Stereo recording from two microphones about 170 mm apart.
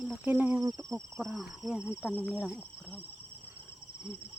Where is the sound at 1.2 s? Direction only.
Centre (ahead or behind).